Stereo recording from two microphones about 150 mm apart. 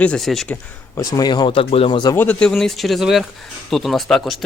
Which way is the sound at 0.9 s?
25° left (ahead or behind).